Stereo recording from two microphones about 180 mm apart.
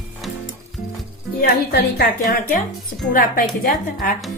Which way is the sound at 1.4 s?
55° left (ahead or behind).